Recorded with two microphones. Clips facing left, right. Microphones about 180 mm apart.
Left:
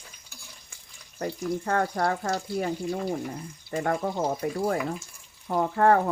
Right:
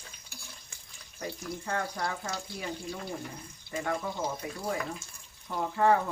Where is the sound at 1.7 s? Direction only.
55° left (ahead or behind).